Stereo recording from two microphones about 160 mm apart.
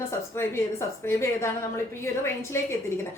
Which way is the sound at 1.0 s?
15° left (ahead or behind).